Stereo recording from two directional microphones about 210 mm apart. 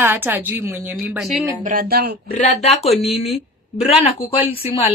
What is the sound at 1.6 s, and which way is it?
Speech, 40° right (ahead or behind).